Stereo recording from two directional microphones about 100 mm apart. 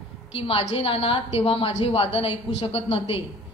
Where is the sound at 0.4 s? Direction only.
70° left (ahead or behind).